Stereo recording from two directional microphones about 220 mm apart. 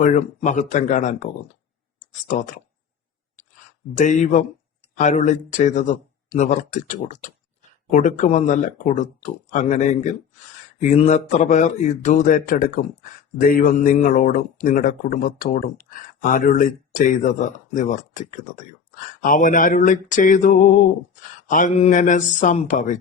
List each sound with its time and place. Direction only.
0.0 s a man's voice: 35° left (ahead or behind)
3.9 s a man's voice: 35° left (ahead or behind)